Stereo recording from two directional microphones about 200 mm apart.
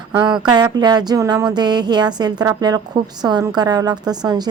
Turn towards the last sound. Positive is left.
turn(degrees=-20)  # may be behind; listen again after turning